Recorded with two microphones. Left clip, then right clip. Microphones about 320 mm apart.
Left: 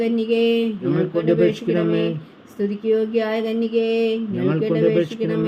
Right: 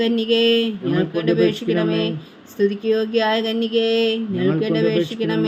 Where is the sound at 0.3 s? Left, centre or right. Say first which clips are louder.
Right 2 dB; right.